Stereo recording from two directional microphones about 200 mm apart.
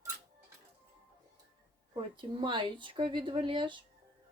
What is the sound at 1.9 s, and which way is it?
Speech, 25° right (ahead or behind).